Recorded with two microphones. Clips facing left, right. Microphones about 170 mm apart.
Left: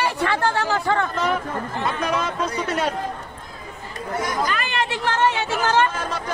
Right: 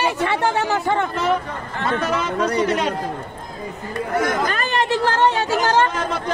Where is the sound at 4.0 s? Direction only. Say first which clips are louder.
Right 4 dB; 55° right (ahead or behind); by 5.9 s 35° right (ahead or behind).